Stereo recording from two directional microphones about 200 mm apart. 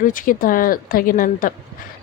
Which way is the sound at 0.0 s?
45° left (ahead or behind).